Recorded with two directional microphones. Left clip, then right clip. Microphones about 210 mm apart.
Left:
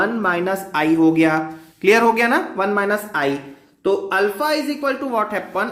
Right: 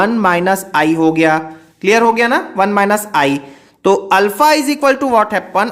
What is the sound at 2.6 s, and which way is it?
A man's voice, 35° right (ahead or behind).